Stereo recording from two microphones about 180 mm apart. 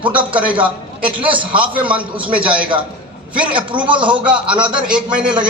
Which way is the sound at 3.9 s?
25° right (ahead or behind).